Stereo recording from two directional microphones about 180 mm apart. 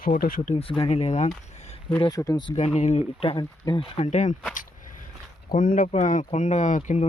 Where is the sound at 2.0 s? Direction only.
20° left (ahead or behind).